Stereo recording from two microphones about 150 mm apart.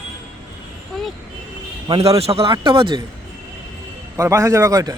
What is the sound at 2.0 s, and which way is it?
Speech, 40° right (ahead or behind).